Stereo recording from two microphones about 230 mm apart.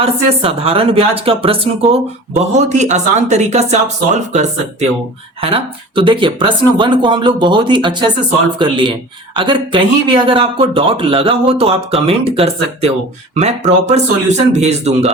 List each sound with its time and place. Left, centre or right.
0.0 s speech: right